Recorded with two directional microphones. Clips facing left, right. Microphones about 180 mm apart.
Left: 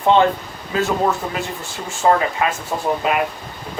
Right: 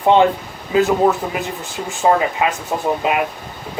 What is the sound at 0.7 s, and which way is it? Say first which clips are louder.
Speech: right 5 dB; 15° right (ahead or behind).